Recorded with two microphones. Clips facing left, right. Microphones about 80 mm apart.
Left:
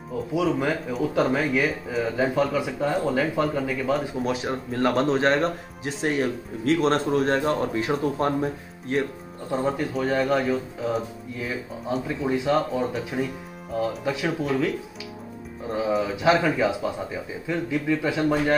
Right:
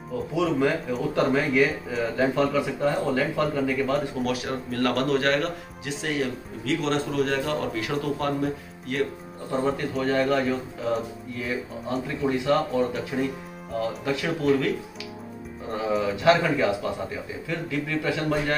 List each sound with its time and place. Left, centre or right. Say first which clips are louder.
0.4 s speech: right 1 dB; centre
4.2 s speech: left 1 dB; left
9.5 s speech: even; centre
15.9 s speech: right 1 dB; centre